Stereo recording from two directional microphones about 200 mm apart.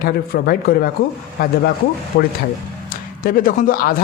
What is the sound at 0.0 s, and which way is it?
A man's voice, 45° left (ahead or behind).